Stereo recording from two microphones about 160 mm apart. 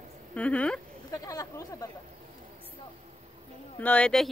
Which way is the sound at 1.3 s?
20° left (ahead or behind).